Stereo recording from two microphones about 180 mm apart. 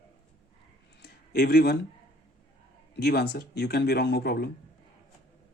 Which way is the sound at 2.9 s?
65° left (ahead or behind).